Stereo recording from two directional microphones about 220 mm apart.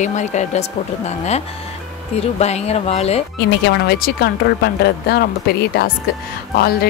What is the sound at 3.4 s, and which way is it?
Speech, 50° left (ahead or behind).